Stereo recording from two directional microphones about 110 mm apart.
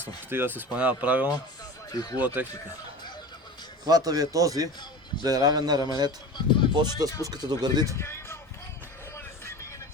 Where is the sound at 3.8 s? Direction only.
35° right (ahead or behind).